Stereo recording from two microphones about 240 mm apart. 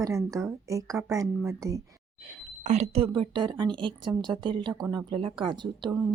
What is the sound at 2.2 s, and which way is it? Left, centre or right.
A woman's voice, right.